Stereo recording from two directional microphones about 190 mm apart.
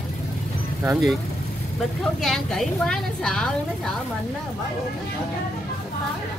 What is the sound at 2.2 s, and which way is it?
Speech, centre (ahead or behind).